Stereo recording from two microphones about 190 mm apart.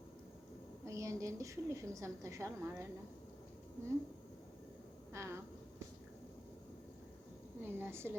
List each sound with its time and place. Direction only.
0.9 s a woman's voice: 15° right (ahead or behind)
5.1 s a woman's voice: 15° right (ahead or behind)
7.6 s a sound: 10° right (ahead or behind)